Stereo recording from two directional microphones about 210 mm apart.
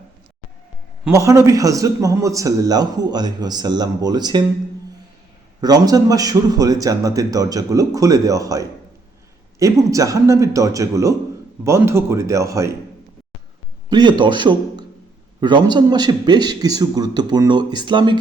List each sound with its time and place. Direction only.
1.0 s a man's voice: 15° right (ahead or behind)
5.5 s a man's voice: 20° right (ahead or behind)
13.9 s a man's voice: 20° right (ahead or behind)